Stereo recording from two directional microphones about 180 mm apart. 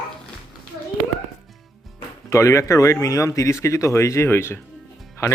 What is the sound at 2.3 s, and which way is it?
Speech, 15° left (ahead or behind).